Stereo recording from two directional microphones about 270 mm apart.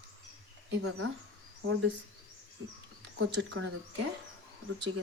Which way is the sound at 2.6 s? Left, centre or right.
Right.